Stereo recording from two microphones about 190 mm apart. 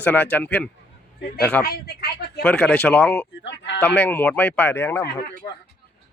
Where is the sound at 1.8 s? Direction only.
55° left (ahead or behind).